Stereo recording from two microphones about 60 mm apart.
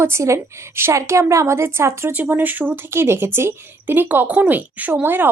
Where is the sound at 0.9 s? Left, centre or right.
Right.